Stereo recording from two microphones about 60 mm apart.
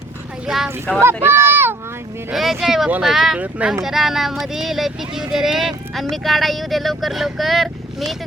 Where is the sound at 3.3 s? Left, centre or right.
Right.